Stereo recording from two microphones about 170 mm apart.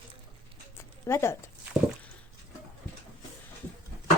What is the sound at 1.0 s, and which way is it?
Speech, 15° left (ahead or behind).